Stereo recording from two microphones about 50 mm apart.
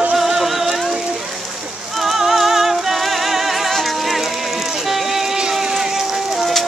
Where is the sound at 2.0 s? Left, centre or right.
Centre.